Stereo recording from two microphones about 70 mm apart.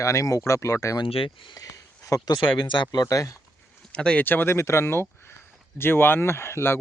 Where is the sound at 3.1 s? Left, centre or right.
Left.